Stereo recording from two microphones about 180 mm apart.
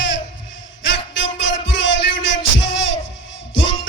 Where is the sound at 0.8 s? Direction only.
90° left.